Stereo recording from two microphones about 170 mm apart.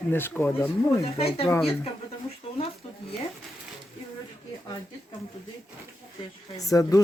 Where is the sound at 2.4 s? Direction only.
35° left (ahead or behind).